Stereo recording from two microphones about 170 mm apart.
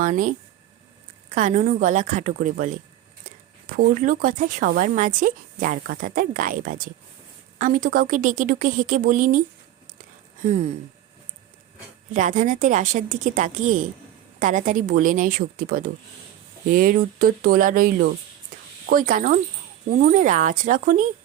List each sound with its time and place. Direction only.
0.0 s speech: 50° right (ahead or behind)
10.0 s a sound: 45° right (ahead or behind)
12.1 s speech: 45° right (ahead or behind)